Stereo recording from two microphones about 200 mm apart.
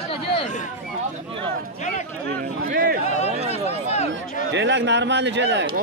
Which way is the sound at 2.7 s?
50° right (ahead or behind).